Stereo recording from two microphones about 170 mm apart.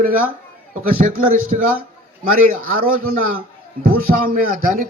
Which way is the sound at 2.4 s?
55° right (ahead or behind).